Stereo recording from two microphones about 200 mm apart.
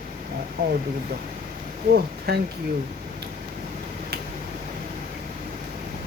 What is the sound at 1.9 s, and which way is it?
Speech, 55° right (ahead or behind).